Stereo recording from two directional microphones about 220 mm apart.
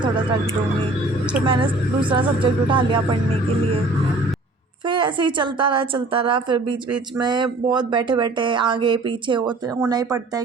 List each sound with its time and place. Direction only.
1.5 s speech: 20° right (ahead or behind)
4.9 s speech: 20° right (ahead or behind)